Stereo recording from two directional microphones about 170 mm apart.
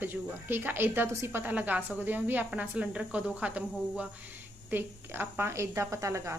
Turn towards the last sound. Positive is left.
turn(degrees=-15)  # may be behind; listen again after turning